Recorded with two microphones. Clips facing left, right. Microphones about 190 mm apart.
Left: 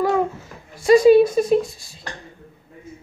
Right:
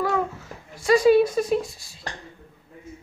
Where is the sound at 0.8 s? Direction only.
20° left (ahead or behind).